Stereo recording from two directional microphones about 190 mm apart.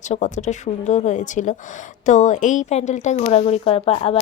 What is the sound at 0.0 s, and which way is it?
Speech, 40° left (ahead or behind).